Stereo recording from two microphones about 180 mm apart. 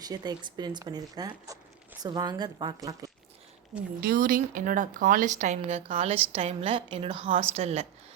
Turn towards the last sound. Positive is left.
turn(degrees=-35)  # may be behind; listen again after turning